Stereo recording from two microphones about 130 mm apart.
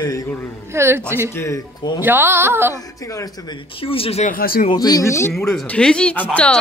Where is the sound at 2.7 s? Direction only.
25° left (ahead or behind).